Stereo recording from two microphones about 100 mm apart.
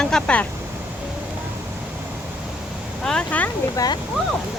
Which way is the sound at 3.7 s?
40° left (ahead or behind).